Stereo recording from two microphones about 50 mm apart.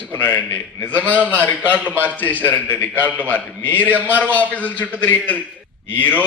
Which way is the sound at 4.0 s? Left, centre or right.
Right.